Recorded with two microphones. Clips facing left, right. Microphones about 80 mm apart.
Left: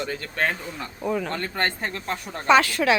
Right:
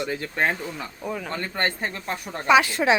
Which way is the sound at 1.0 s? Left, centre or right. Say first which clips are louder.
Left 5 dB; centre.